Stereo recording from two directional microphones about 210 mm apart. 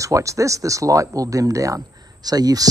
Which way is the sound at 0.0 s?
15° right (ahead or behind).